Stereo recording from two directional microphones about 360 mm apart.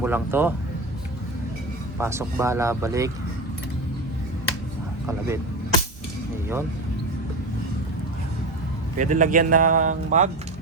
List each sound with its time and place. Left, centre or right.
0.0 s speech: centre
2.0 s speech: centre
5.0 s speech: centre
9.0 s speech: right